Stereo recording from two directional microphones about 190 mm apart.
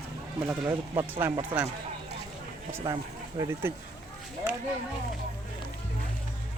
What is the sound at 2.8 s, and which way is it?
Speech, 20° right (ahead or behind).